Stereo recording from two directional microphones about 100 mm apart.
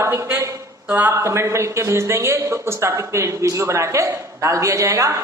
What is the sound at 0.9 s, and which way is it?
A man's voice, 20° right (ahead or behind).